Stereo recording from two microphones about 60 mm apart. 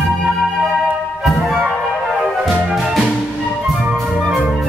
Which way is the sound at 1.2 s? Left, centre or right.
Centre.